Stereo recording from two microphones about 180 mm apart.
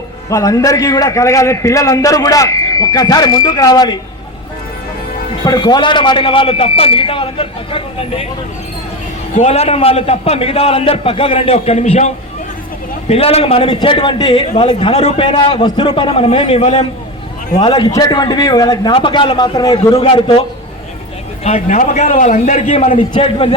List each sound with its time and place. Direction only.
0.3 s a man's voice: 20° left (ahead or behind)
5.5 s a man's voice: 25° left (ahead or behind)
9.4 s a man's voice: 35° left (ahead or behind)
17.6 s a man's voice: 25° left (ahead or behind)
21.4 s a man's voice: 40° left (ahead or behind)